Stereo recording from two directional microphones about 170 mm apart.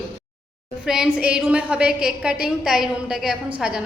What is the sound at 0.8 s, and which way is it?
A woman's voice, 5° right (ahead or behind).